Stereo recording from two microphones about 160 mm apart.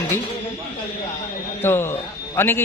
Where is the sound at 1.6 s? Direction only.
15° left (ahead or behind).